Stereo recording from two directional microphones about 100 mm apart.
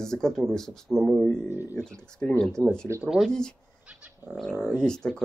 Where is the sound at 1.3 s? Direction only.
25° left (ahead or behind).